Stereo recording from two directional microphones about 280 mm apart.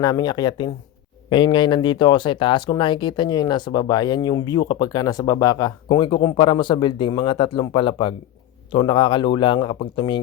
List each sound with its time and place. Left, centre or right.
0.0 s speech: centre